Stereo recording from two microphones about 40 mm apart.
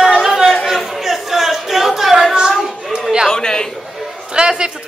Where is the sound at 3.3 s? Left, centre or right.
Centre.